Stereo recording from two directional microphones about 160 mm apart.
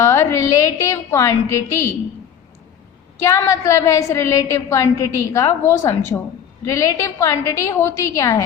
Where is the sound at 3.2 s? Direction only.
20° left (ahead or behind).